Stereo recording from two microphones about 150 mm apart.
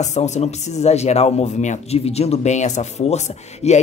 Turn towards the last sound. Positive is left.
turn(degrees=45)  # may be behind; listen again after turning